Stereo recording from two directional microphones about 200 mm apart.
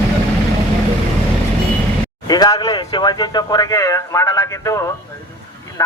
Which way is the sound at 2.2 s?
20° left (ahead or behind).